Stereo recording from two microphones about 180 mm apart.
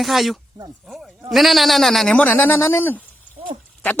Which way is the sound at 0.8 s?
Centre (ahead or behind).